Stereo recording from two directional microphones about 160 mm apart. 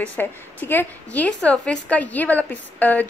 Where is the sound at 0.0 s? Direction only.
10° left (ahead or behind).